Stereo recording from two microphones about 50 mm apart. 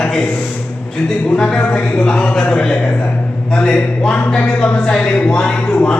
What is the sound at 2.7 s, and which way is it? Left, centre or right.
Speech, left.